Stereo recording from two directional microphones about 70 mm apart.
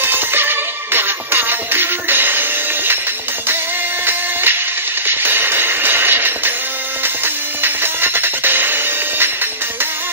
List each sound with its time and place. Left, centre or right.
0.0 s music: right
4.0 s music: right
7.6 s music: right